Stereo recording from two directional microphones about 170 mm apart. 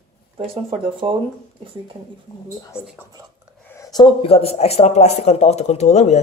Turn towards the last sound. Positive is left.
turn(degrees=40)  # may be behind; listen again after turning